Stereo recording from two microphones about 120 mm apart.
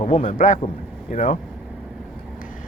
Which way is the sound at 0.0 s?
80° left.